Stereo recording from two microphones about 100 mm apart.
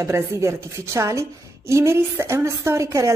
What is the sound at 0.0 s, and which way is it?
A woman's voice, 30° right (ahead or behind).